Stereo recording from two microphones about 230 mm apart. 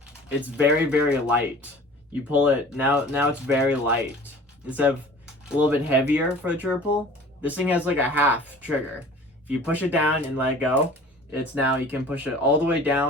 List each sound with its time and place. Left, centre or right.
0.0 s speech: centre